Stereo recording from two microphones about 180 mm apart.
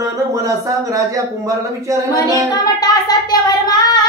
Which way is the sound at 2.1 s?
20° left (ahead or behind).